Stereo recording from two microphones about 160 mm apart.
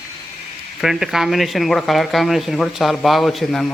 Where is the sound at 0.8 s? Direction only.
Centre (ahead or behind).